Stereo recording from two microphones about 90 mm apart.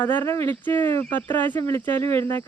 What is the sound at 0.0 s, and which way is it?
Speech, 20° left (ahead or behind).